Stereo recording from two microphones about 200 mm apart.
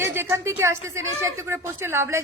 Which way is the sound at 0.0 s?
10° right (ahead or behind).